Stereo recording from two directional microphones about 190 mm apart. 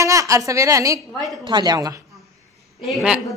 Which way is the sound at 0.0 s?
15° right (ahead or behind).